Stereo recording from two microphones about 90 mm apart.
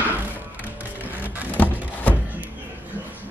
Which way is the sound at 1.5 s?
20° left (ahead or behind).